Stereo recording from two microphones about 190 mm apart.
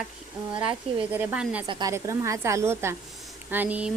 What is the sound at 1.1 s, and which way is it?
Speech, 10° right (ahead or behind).